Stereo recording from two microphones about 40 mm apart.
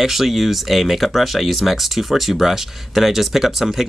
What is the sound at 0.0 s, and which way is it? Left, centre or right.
Speech, centre.